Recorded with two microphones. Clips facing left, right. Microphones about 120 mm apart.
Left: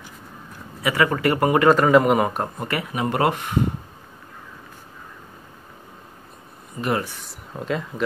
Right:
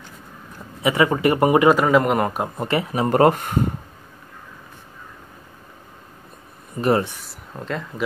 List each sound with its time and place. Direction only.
0.8 s speech: 20° right (ahead or behind)
1.7 s a man's voice: 5° right (ahead or behind)
2.6 s speech: 25° right (ahead or behind); by 3.6 s 45° right (ahead or behind)
6.8 s speech: 35° right (ahead or behind)
7.2 s speech: 5° left (ahead or behind)